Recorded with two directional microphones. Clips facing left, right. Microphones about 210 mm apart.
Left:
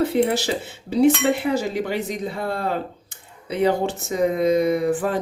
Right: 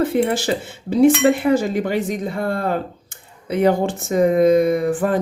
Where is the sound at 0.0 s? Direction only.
50° right (ahead or behind).